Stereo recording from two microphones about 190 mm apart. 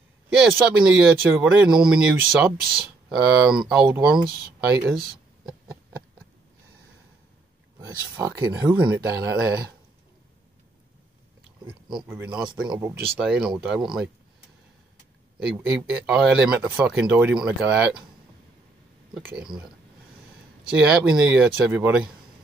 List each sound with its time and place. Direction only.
0.3 s speech: 5° right (ahead or behind)
7.8 s speech: 15° right (ahead or behind)
12.1 s speech: 10° right (ahead or behind)
15.4 s speech: 10° right (ahead or behind)
19.1 s speech: 5° right (ahead or behind)
20.9 s speech: 5° right (ahead or behind)